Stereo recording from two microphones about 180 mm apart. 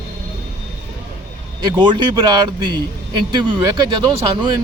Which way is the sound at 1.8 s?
25° right (ahead or behind).